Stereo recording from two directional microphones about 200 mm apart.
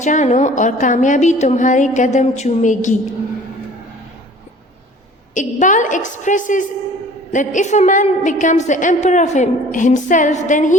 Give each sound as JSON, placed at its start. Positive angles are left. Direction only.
{"t": 0.0, "sound": "a woman's voice", "side_deg": 35}
{"t": 5.3, "sound": "a woman's voice", "side_deg": 40}